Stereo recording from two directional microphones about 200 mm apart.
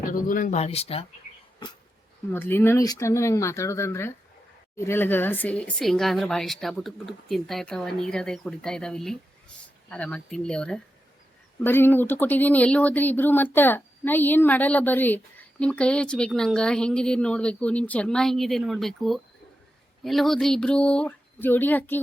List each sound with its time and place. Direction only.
0.1 s speech: 45° left (ahead or behind)
2.3 s speech: 10° left (ahead or behind)